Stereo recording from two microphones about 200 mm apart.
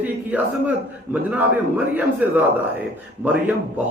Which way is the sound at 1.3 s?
5° right (ahead or behind).